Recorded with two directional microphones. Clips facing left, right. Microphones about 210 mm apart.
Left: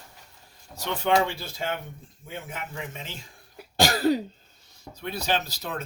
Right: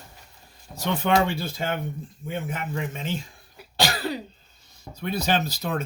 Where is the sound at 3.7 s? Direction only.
45° left (ahead or behind).